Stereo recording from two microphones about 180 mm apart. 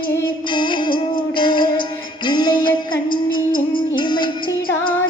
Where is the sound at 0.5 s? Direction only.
25° left (ahead or behind).